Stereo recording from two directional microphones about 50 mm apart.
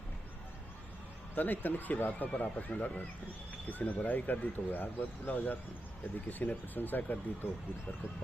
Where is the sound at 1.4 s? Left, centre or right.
Left.